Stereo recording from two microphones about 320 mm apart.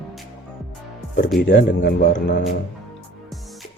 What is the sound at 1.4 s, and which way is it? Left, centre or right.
Speech, left.